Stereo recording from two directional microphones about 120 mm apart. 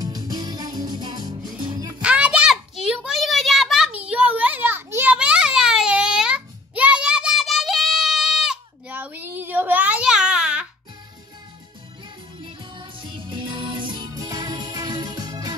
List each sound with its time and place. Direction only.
0.0 s music: 35° right (ahead or behind)
2.0 s a sound: 10° right (ahead or behind)
4.1 s children playing: 10° right (ahead or behind)
8.8 s baby cry: 15° right (ahead or behind)
12.4 s music: 45° right (ahead or behind)
14.2 s music: 30° right (ahead or behind)